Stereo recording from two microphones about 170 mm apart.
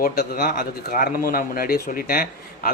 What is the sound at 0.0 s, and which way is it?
Speech, 60° left (ahead or behind).